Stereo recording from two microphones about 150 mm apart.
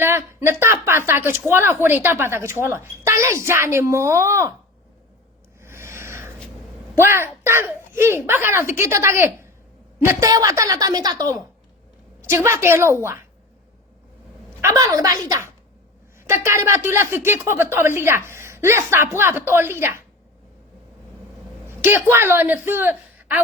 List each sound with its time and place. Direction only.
0.0 s speech: 15° right (ahead or behind)
5.5 s a sound: 15° right (ahead or behind)
7.0 s a woman's voice: 15° right (ahead or behind)
14.6 s a woman's voice: 20° right (ahead or behind)
21.7 s a man's voice: 15° right (ahead or behind)